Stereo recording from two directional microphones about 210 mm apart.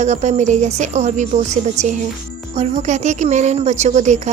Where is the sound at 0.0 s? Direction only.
35° right (ahead or behind).